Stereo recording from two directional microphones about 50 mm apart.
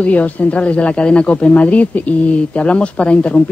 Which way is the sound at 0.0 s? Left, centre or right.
Left.